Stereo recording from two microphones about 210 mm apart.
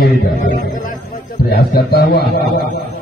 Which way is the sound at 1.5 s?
50° left (ahead or behind).